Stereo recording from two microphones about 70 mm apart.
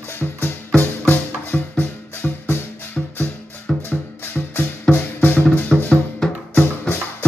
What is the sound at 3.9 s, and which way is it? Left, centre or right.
Music, left.